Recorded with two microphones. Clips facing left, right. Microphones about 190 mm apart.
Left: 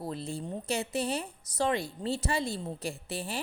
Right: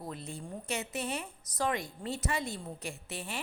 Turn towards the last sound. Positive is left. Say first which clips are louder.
# left 4 dB
turn(degrees=35)  # may be behind; listen again after turning